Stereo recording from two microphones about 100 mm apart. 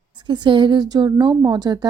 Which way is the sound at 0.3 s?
50° right (ahead or behind).